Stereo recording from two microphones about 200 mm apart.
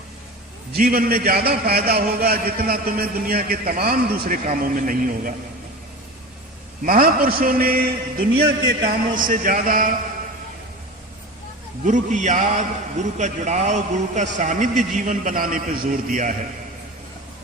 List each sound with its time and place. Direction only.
0.7 s a man's voice: 45° right (ahead or behind)
6.8 s a man's voice: 45° right (ahead or behind)
8.6 s a man's voice: 60° right (ahead or behind)
9.1 s a man's voice: 45° right (ahead or behind)
11.9 s a man's voice: 35° right (ahead or behind)